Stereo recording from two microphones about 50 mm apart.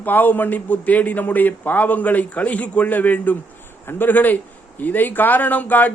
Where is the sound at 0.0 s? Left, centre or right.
Left.